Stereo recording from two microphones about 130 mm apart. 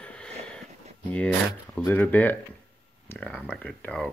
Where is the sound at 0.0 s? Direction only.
10° left (ahead or behind).